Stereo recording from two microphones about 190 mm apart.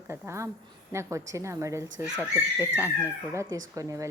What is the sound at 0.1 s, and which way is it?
A woman's voice, 15° right (ahead or behind).